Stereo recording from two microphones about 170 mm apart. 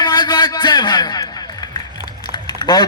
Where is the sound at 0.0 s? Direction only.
25° left (ahead or behind).